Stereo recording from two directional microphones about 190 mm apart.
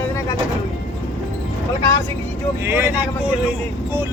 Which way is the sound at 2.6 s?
10° right (ahead or behind).